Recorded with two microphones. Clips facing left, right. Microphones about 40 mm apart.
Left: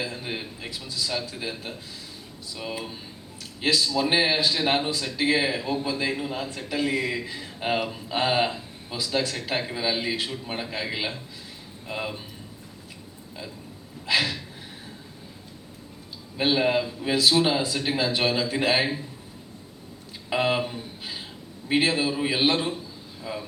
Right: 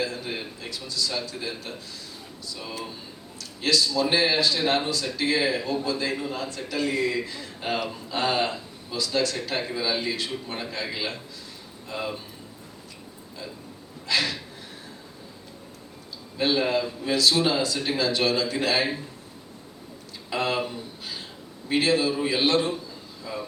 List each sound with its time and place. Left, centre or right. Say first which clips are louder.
0.0 s a man's voice: right 2 dB; centre
14.1 s a man's voice: left 1 dB; centre
16.4 s a man's voice: left 1 dB; centre
20.3 s a man's voice: left 2 dB; centre